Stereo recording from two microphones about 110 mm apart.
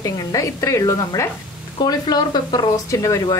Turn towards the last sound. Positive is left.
turn(degrees=30)  # may be behind; listen again after turning